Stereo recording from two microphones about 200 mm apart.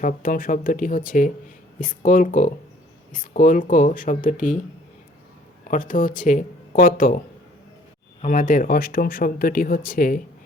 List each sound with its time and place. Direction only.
0.0 s speech: 45° left (ahead or behind)
5.7 s speech: 40° left (ahead or behind)
8.2 s speech: 40° left (ahead or behind)